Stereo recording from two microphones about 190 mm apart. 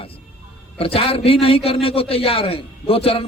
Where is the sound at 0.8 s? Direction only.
30° left (ahead or behind).